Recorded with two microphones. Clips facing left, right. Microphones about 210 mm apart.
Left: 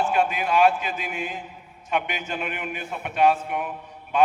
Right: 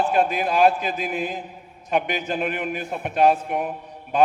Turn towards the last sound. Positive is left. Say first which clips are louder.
# right 2 dB
turn(degrees=-35)  # may be behind; listen again after turning